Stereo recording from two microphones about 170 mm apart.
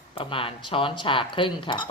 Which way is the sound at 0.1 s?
30° left (ahead or behind).